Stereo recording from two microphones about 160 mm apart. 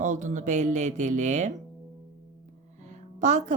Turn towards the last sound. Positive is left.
turn(degrees=-50)  # may be behind; listen again after turning